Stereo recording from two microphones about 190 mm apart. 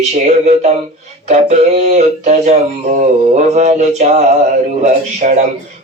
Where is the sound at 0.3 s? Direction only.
35° right (ahead or behind).